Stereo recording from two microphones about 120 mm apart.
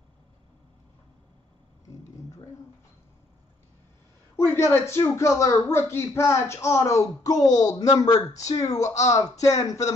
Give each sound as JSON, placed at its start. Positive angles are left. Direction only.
{"t": 4.4, "sound": "speech", "side_deg": 20}